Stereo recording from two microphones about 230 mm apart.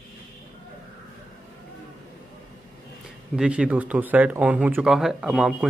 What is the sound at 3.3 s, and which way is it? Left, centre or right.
Speech, centre.